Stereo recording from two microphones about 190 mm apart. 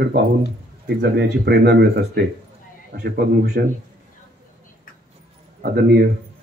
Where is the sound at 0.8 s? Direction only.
55° right (ahead or behind).